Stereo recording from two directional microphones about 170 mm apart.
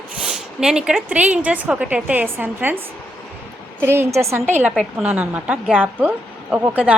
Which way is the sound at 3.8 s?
15° right (ahead or behind).